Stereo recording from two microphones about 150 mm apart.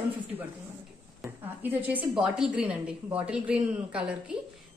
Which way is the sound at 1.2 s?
10° right (ahead or behind).